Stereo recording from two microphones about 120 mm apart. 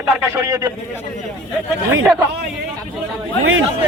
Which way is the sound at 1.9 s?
10° right (ahead or behind).